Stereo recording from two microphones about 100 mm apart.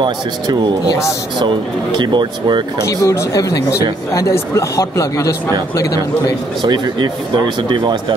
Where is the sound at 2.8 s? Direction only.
35° left (ahead or behind).